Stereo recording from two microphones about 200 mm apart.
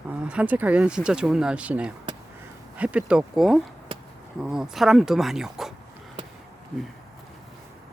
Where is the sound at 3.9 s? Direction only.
25° right (ahead or behind).